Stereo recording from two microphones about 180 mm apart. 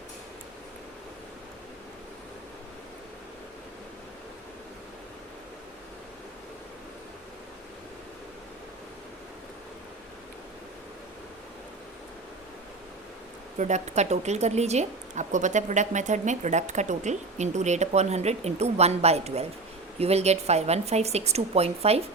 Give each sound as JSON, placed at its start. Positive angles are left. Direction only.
{"t": 13.6, "sound": "a woman's voice", "side_deg": -40}